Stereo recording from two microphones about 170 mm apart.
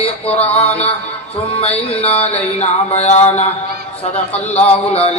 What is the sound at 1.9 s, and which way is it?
Speech, 35° left (ahead or behind).